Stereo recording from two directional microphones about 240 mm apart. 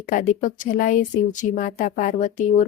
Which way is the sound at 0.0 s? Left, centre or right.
Left.